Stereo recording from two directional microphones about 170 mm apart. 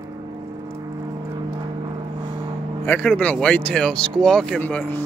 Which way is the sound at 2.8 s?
10° left (ahead or behind).